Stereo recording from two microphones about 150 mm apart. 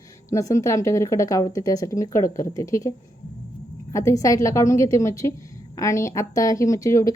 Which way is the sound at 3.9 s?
20° left (ahead or behind).